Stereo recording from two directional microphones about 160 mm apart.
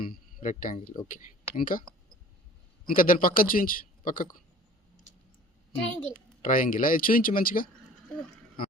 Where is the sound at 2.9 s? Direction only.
60° left (ahead or behind).